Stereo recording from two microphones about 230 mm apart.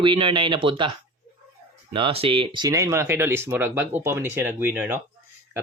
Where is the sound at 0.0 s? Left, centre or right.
Right.